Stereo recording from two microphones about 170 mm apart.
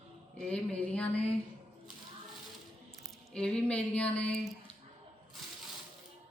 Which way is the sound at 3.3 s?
5° left (ahead or behind).